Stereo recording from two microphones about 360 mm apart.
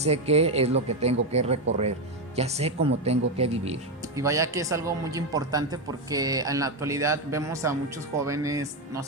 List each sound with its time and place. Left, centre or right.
0.0 s speech: centre